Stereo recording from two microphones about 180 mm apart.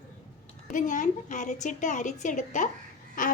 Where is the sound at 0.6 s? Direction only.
45° left (ahead or behind).